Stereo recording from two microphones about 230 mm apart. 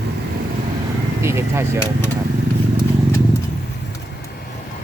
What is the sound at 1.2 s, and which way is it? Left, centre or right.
Speech, centre.